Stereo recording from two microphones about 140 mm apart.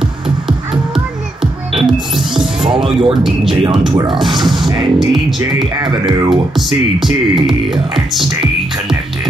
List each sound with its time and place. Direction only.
1.8 s music: centre (ahead or behind)
2.8 s speech: 40° right (ahead or behind)
4.2 s speech: centre (ahead or behind)
5.8 s speech: 35° right (ahead or behind)
7.0 s speech: centre (ahead or behind)